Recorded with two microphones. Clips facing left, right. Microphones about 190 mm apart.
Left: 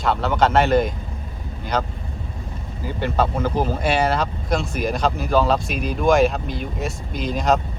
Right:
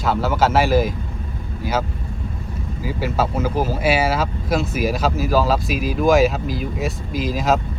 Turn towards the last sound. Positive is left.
turn(degrees=0)  # may be behind; listen again after turning